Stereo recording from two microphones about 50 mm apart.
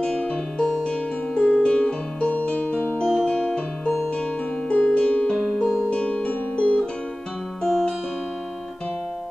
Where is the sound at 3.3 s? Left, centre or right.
Centre.